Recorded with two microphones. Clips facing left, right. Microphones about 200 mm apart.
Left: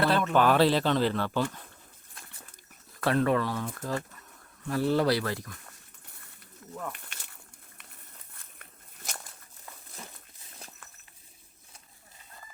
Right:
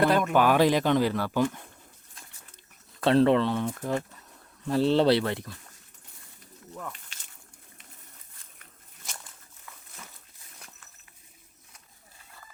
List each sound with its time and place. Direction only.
0.0 s speech: 15° right (ahead or behind)
3.0 s speech: 25° right (ahead or behind)
6.9 s a sound: 60° left (ahead or behind)